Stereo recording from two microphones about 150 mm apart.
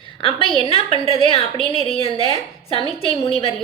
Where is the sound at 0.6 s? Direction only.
40° left (ahead or behind).